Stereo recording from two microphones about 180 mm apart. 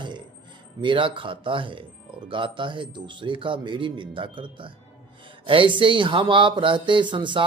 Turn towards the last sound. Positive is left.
turn(degrees=-25)  # may be behind; listen again after turning